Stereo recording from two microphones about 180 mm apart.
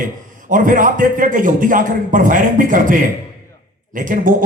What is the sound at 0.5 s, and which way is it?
A man's voice, 50° right (ahead or behind).